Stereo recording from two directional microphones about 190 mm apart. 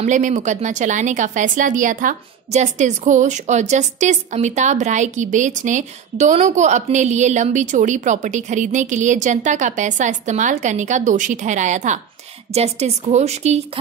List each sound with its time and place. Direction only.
0.0 s a woman's voice: 40° right (ahead or behind)